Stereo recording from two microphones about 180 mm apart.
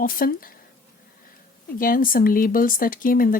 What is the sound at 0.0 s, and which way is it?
Speech, 50° left (ahead or behind).